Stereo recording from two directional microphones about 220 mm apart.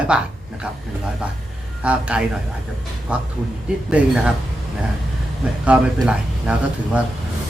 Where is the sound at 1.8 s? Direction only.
5° right (ahead or behind).